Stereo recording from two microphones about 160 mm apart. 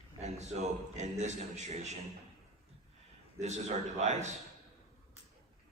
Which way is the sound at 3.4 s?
45° right (ahead or behind).